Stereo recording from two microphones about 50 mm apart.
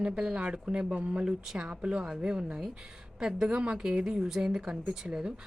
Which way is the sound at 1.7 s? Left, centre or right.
Right.